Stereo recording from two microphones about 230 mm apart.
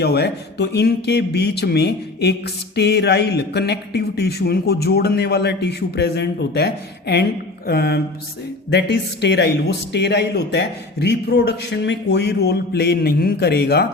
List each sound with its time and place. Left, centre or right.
0.0 s speech: left